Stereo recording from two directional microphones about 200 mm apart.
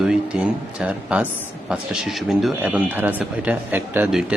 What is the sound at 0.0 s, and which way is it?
Speech, 5° right (ahead or behind).